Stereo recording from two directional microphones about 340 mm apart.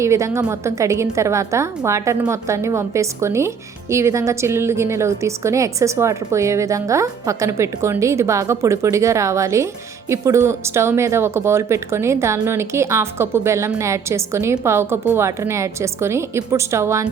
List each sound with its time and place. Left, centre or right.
0.0 s a woman's voice: centre